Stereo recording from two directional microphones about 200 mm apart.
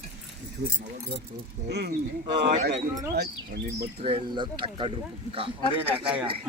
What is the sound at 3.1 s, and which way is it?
Speech, 55° right (ahead or behind).